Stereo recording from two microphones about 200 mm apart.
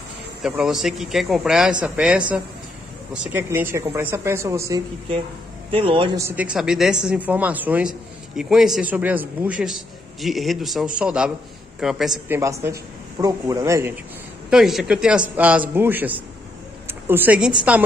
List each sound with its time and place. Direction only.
0.4 s a man's voice: 5° right (ahead or behind)
5.7 s a man's voice: 25° right (ahead or behind)
6.1 s a man's voice: 10° right (ahead or behind)
13.2 s speech: 15° right (ahead or behind)
14.5 s speech: centre (ahead or behind)